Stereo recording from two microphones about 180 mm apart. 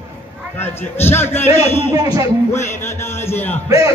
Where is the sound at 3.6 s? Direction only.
20° right (ahead or behind).